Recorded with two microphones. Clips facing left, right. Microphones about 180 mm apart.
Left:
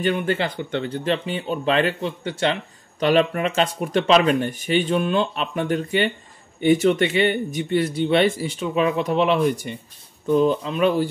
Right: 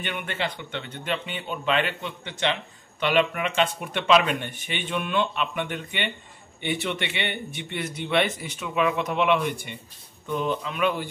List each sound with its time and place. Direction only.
0.0 s a man's voice: 35° left (ahead or behind)